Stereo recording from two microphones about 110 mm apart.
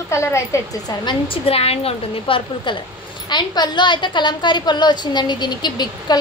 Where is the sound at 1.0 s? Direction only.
55° left (ahead or behind).